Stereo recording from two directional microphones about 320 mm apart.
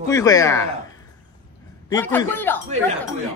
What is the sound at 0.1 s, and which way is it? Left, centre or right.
Speech, centre.